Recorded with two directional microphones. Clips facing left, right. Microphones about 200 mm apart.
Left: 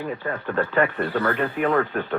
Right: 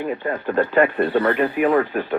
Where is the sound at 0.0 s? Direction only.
20° right (ahead or behind).